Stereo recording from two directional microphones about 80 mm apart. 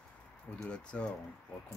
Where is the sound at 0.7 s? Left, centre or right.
Centre.